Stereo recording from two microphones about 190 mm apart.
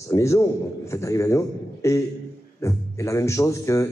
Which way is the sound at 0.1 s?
15° left (ahead or behind).